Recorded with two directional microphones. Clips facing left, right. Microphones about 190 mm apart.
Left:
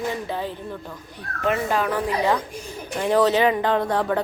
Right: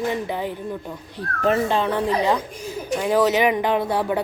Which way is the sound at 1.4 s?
30° right (ahead or behind).